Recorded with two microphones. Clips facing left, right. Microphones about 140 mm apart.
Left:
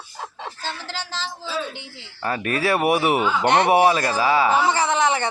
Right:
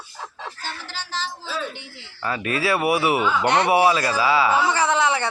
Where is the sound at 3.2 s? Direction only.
20° left (ahead or behind).